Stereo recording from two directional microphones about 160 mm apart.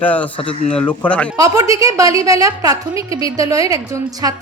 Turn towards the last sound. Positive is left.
turn(degrees=-20)  # may be behind; listen again after turning